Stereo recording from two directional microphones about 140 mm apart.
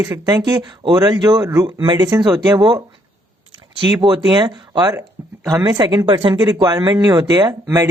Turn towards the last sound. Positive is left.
turn(degrees=-25)  # may be behind; listen again after turning